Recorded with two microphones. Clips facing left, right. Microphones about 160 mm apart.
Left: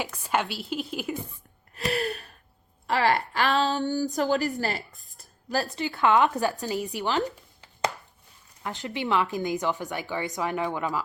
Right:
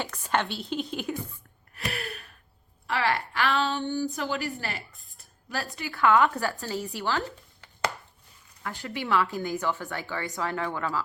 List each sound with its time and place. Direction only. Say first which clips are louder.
0.0 s a woman's voice: left 1 dB; 10° left (ahead or behind)
1.7 s gasp: left 7 dB; 35° left (ahead or behind)
2.8 s a sound: left 4 dB; 40° left (ahead or behind)
5.7 s a woman's voice: even; 25° left (ahead or behind)